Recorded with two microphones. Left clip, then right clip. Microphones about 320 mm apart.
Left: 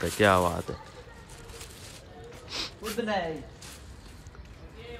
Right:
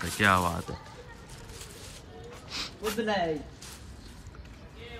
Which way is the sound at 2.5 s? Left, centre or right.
Centre.